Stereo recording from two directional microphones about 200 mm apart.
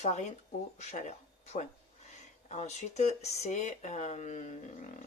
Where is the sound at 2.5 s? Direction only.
35° left (ahead or behind).